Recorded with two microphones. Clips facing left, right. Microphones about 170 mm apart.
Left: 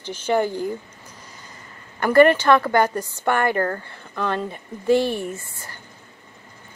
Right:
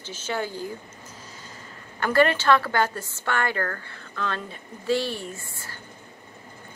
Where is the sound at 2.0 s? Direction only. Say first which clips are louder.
Left 7 dB; 15° left (ahead or behind).